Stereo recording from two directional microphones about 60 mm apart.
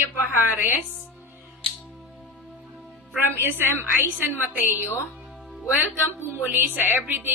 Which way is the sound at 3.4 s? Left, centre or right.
Right.